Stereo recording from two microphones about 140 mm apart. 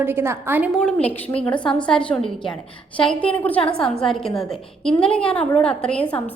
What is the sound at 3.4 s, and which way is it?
A woman's voice, 10° left (ahead or behind).